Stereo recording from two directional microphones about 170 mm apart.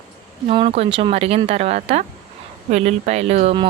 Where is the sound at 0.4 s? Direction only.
30° right (ahead or behind).